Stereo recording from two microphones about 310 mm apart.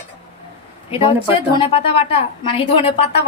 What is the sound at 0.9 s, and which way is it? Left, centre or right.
A woman's voice, centre.